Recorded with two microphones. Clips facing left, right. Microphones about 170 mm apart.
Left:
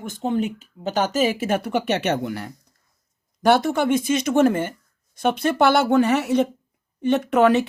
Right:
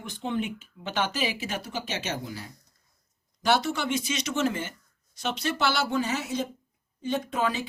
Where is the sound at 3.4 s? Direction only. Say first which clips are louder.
Left 8 dB; 55° left (ahead or behind).